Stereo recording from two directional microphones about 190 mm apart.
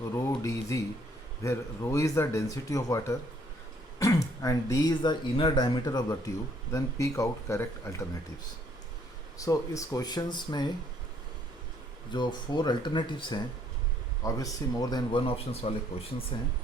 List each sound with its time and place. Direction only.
0.0 s speech: 15° left (ahead or behind)
9.4 s speech: 15° left (ahead or behind)
12.1 s speech: 25° left (ahead or behind)